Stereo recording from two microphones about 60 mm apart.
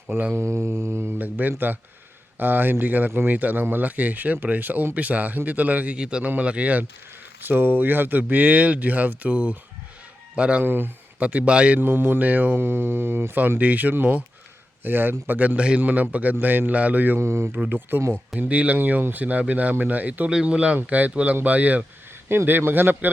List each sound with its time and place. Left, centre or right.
0.3 s a sound: right
1.2 s speech: right
3.1 s speech: right
3.3 s speech: right
6.0 s speech: centre
7.4 s speech: right; by 10.6 s centre
10.6 s speech: right
11.2 s speech: right
11.8 s speech: right
17.2 s speech: right
17.7 s speech: right
18.3 s speech: right
22.3 s speech: right